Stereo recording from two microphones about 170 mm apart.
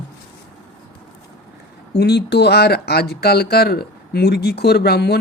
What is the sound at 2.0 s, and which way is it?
Speech, 75° left (ahead or behind).